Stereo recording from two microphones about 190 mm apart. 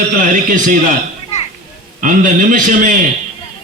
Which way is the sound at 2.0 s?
45° right (ahead or behind).